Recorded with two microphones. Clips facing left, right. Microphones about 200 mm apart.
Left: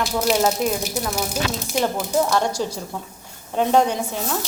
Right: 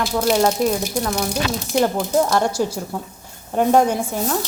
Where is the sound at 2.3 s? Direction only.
10° right (ahead or behind).